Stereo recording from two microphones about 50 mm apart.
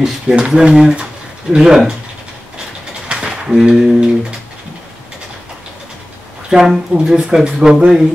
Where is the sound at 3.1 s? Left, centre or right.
Centre.